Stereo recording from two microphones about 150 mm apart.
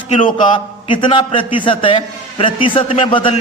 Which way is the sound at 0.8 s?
35° left (ahead or behind).